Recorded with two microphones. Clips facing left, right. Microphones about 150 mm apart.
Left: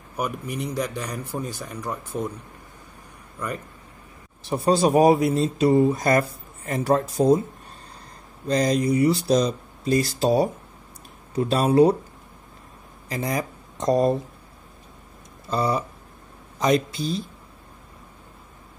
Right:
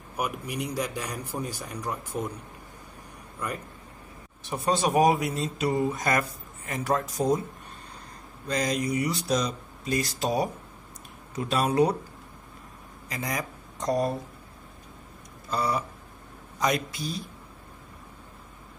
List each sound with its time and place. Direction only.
0.2 s a man's voice: 10° right (ahead or behind)
4.4 s speech: 35° left (ahead or behind)
8.5 s speech: 35° left (ahead or behind)
13.1 s speech: 30° left (ahead or behind)
15.5 s speech: 25° left (ahead or behind)